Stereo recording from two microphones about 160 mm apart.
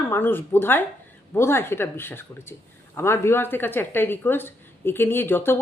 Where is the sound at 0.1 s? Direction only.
15° left (ahead or behind).